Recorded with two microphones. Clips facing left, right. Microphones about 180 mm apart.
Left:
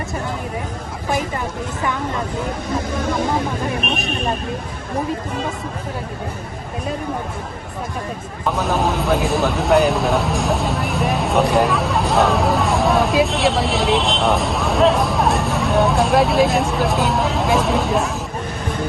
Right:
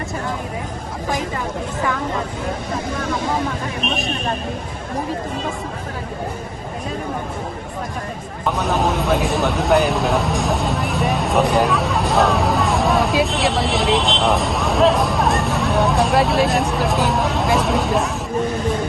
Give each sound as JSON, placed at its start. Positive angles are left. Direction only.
{"t": 3.8, "sound": "speech", "side_deg": 60}
{"t": 8.4, "sound": "speech", "side_deg": 0}